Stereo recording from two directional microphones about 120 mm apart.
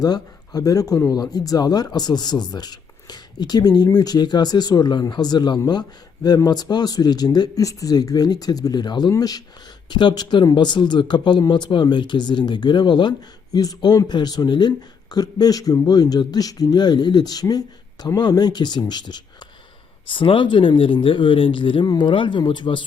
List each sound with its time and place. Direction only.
0.0 s speech: 30° left (ahead or behind)